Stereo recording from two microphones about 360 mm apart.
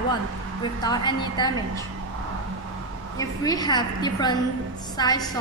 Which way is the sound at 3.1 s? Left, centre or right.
Centre.